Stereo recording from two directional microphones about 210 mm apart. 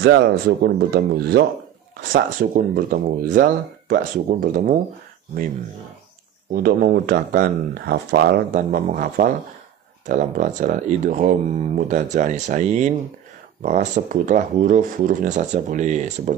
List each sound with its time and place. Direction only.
0.0 s speech: 50° right (ahead or behind)
6.5 s speech: 45° right (ahead or behind)